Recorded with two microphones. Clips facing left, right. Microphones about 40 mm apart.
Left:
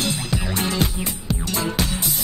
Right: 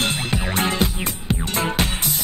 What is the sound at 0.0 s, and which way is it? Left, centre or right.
Music, right.